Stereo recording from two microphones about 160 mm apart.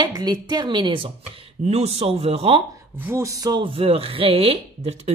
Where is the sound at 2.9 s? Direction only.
15° right (ahead or behind); by 5.0 s 40° right (ahead or behind).